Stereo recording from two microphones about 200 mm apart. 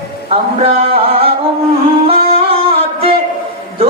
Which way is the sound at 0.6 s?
30° right (ahead or behind).